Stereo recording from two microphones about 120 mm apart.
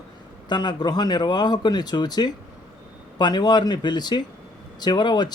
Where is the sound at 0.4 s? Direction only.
40° left (ahead or behind).